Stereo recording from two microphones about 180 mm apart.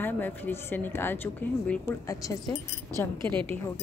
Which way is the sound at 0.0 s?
10° left (ahead or behind).